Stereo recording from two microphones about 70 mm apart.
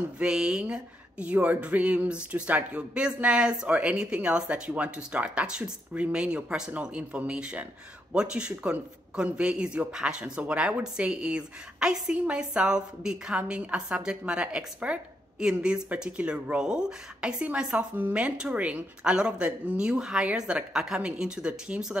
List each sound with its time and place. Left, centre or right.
0.2 s speech: centre